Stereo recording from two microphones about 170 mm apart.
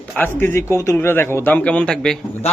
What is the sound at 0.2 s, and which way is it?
A man's voice, 15° left (ahead or behind).